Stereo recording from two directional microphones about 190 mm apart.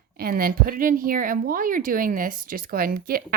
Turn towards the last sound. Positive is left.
turn(degrees=-50)  # may be behind; listen again after turning